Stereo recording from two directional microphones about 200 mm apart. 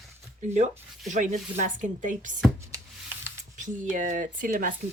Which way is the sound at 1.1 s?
35° right (ahead or behind).